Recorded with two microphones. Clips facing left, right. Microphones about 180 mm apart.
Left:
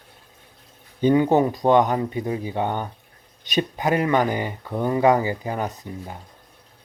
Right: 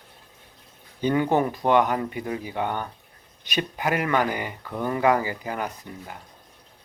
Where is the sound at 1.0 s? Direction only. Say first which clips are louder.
Left 5 dB; 20° left (ahead or behind).